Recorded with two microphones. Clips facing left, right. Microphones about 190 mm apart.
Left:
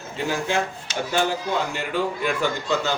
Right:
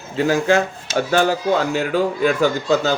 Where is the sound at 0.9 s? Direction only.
90° right.